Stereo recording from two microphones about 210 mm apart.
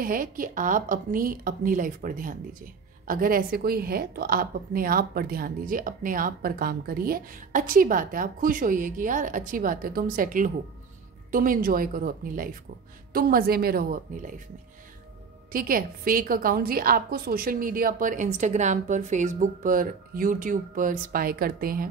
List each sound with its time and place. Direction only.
0.0 s a woman's voice: 40° right (ahead or behind)
15.5 s a woman's voice: 45° right (ahead or behind)